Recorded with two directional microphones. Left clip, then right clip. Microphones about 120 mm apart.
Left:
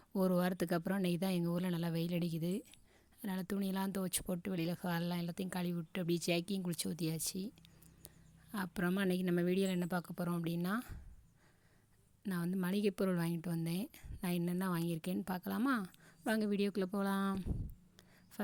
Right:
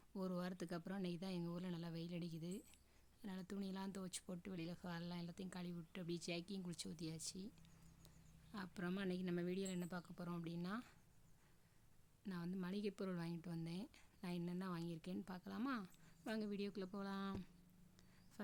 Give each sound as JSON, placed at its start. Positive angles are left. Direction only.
{"t": 0.1, "sound": "a woman's voice", "side_deg": 55}
{"t": 8.5, "sound": "a woman's voice", "side_deg": 50}
{"t": 12.3, "sound": "a woman's voice", "side_deg": 55}